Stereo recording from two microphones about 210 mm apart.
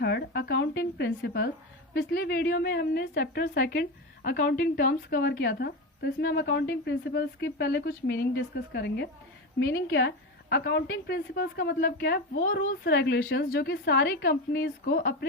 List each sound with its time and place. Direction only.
0.0 s a woman's voice: 50° left (ahead or behind)